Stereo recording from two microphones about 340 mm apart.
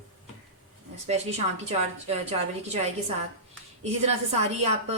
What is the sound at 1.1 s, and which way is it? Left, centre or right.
A woman's voice, centre.